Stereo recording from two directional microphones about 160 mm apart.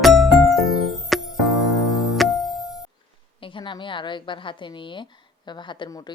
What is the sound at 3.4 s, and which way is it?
A woman's voice, 30° left (ahead or behind).